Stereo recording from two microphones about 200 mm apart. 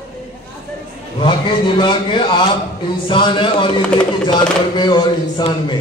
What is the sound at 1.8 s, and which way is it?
Speech, 25° left (ahead or behind).